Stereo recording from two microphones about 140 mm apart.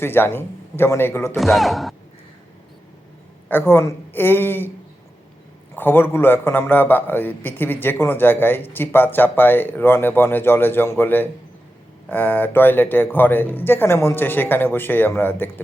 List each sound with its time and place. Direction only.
0.0 s a man's voice: 15° left (ahead or behind)
1.4 s speech: centre (ahead or behind)
3.5 s a man's voice: 15° left (ahead or behind)
5.7 s a man's voice: 15° left (ahead or behind)